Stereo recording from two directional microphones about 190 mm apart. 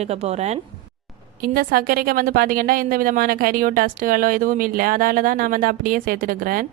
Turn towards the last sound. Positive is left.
turn(degrees=-50)  # may be behind; listen again after turning